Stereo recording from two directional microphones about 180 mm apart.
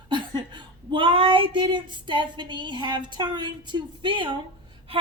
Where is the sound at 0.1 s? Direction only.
25° right (ahead or behind).